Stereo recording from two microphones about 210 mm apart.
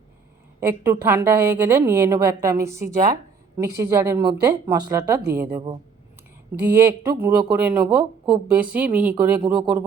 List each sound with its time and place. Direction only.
0.6 s a woman's voice: 10° right (ahead or behind)
3.8 s a woman's voice: 15° right (ahead or behind)
6.7 s a woman's voice: 15° right (ahead or behind)
9.4 s speech: 20° right (ahead or behind)